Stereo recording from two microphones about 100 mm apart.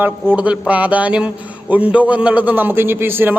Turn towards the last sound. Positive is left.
turn(degrees=-20)  # may be behind; listen again after turning